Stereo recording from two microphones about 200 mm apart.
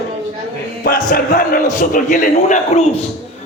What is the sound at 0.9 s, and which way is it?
A man's voice, 45° left (ahead or behind).